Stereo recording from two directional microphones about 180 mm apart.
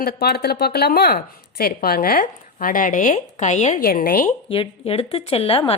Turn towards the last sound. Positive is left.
turn(degrees=30)  # may be behind; listen again after turning